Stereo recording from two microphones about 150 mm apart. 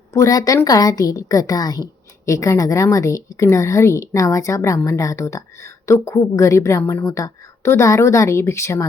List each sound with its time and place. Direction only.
0.1 s a woman's voice: 20° left (ahead or behind)